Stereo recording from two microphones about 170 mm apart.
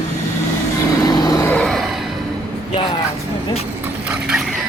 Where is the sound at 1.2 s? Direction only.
20° left (ahead or behind).